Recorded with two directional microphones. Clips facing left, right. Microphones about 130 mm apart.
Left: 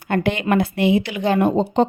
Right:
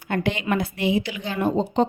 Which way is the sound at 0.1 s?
55° left (ahead or behind).